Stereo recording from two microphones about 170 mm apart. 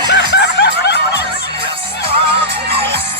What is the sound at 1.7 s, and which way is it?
Music, 35° right (ahead or behind).